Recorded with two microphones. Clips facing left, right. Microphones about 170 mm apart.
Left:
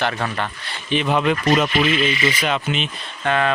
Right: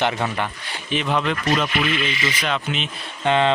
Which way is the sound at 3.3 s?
20° right (ahead or behind).